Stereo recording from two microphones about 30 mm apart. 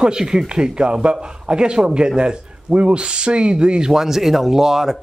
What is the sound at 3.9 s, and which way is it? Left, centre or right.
Speech, centre.